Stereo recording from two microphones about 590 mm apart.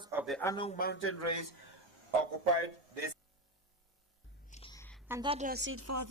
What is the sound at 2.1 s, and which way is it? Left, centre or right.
A man's voice, left.